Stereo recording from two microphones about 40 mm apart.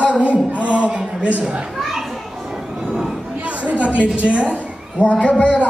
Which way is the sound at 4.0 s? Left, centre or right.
Right.